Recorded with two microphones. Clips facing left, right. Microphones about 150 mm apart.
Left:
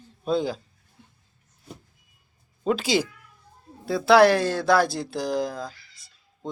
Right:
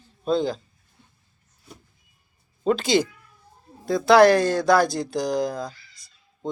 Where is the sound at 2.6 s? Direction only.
5° left (ahead or behind).